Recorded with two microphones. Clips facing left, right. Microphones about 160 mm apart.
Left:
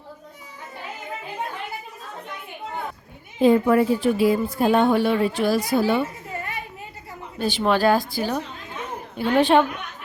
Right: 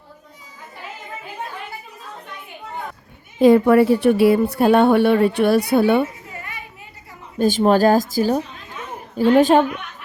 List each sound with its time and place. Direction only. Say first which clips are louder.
3.4 s a woman's voice: right 5 dB; 70° right (ahead or behind)
7.3 s a woman's voice: right 6 dB; 45° right (ahead or behind)